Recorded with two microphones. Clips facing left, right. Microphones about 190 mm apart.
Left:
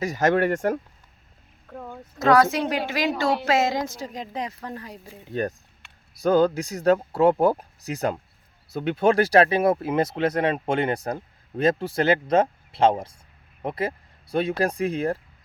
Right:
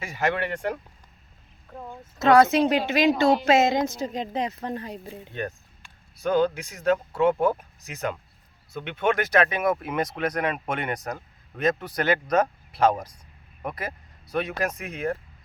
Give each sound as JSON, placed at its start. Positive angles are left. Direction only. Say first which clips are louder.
{"t": 0.0, "sound": "speech", "louder": "left 6 dB", "side_deg": 40}
{"t": 2.1, "sound": "a woman's voice", "louder": "right 1 dB", "side_deg": -25}
{"t": 5.3, "sound": "speech", "louder": "left 7 dB", "side_deg": 40}